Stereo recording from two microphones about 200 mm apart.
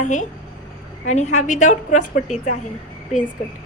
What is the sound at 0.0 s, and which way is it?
A woman's voice, 40° left (ahead or behind).